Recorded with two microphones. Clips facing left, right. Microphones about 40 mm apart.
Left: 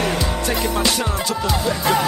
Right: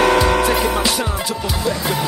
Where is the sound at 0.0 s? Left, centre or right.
Right.